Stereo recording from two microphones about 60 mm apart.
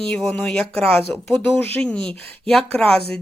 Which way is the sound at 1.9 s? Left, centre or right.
Centre.